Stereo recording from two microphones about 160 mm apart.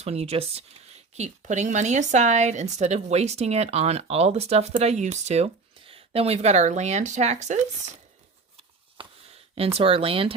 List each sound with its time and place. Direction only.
0.0 s speech: 40° right (ahead or behind)
8.5 s a sound: 35° right (ahead or behind)
9.7 s speech: 35° right (ahead or behind)